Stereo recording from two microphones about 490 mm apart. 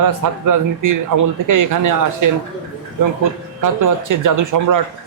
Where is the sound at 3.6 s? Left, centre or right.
Right.